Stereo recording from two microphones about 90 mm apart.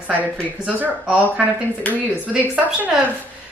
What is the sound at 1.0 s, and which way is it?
Speech, 10° right (ahead or behind).